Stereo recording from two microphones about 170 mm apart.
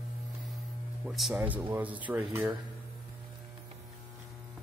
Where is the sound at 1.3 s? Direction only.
10° right (ahead or behind).